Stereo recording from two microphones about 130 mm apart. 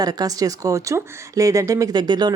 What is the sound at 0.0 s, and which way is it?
Speech, 30° right (ahead or behind).